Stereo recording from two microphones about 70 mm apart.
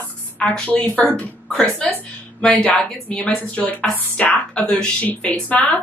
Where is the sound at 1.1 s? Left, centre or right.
Centre.